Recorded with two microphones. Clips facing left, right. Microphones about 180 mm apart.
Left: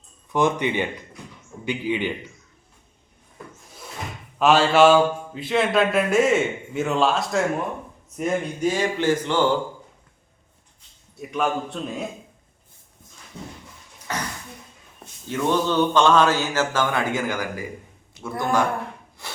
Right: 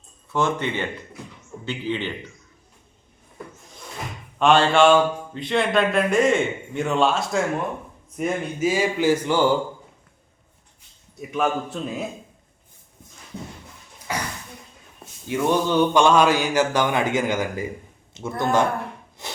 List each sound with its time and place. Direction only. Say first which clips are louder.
0.3 s speech: left 2 dB; 15° left (ahead or behind)
4.4 s speech: even; 5° left (ahead or behind)
8.1 s mantra: left 1 dB; 5° right (ahead or behind)
11.2 s speech: right 1 dB; centre (ahead or behind)
14.1 s a sound: right 1 dB; 10° right (ahead or behind)
14.9 s mantra: right 2 dB; 15° right (ahead or behind)
18.1 s speech: right 2 dB; 20° right (ahead or behind)
19.2 s wood: right 3 dB; 20° right (ahead or behind)